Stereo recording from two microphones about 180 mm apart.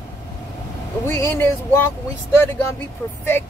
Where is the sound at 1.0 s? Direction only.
15° left (ahead or behind).